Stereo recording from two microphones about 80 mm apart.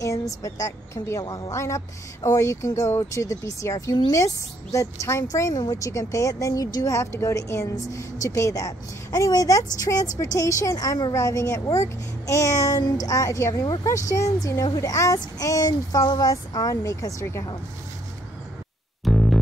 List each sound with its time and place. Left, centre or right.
0.0 s speech: left
1.2 s a woman's voice: left
1.5 s speech: left
5.5 s speech: left
19.0 s music: centre